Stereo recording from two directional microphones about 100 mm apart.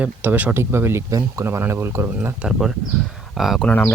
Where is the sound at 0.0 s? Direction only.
15° right (ahead or behind).